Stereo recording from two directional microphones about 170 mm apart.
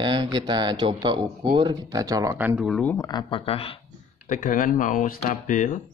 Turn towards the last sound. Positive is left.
turn(degrees=50)  # may be behind; listen again after turning